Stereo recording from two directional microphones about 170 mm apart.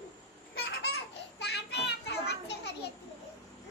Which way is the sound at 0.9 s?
75° left (ahead or behind).